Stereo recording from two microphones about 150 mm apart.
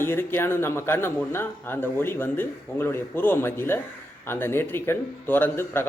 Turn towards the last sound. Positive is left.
turn(degrees=15)  # may be behind; listen again after turning